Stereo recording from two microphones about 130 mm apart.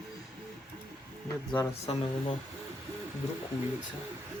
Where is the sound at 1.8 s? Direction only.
55° left (ahead or behind).